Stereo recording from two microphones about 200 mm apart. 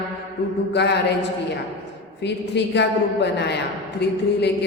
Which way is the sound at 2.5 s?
60° left (ahead or behind).